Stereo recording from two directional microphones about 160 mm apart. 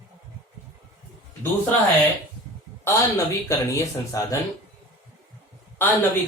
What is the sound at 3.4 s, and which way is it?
Speech, 20° left (ahead or behind).